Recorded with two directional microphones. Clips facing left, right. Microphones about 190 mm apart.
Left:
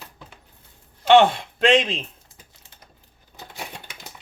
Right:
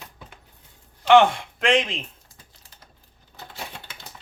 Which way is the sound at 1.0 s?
30° left (ahead or behind).